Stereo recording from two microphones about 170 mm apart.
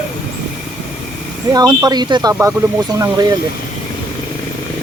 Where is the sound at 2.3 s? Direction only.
15° right (ahead or behind).